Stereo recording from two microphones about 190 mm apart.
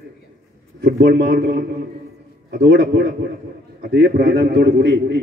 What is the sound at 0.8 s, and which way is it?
Speech, 60° right (ahead or behind).